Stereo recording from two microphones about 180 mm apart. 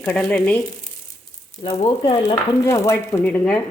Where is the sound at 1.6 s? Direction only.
30° left (ahead or behind).